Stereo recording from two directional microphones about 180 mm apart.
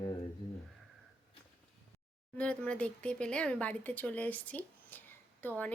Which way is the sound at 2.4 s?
5° left (ahead or behind).